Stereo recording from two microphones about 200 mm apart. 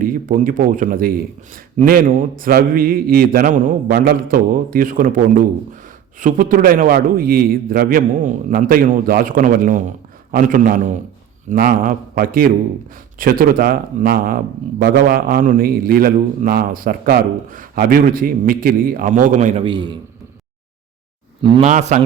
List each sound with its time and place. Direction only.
0.0 s a man's voice: 45° right (ahead or behind)
19.6 s a man's voice: 25° right (ahead or behind)
21.4 s a man's voice: 30° right (ahead or behind)